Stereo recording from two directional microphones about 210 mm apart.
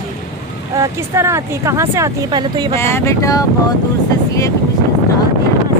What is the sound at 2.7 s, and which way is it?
Speech, 10° left (ahead or behind).